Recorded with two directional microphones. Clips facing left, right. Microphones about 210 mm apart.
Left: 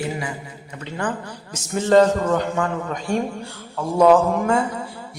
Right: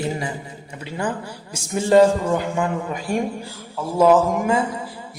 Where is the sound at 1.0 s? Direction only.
10° right (ahead or behind).